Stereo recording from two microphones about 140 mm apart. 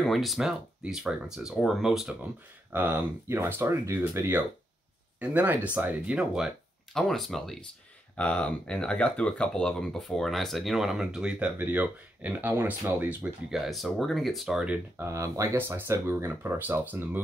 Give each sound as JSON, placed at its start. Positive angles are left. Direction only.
{"t": 0.0, "sound": "speech", "side_deg": 0}
{"t": 2.7, "sound": "speech", "side_deg": -15}
{"t": 13.7, "sound": "speech", "side_deg": 0}
{"t": 15.0, "sound": "speech", "side_deg": -20}